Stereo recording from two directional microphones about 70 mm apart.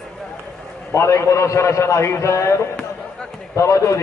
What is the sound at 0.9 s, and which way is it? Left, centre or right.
A man's voice, left.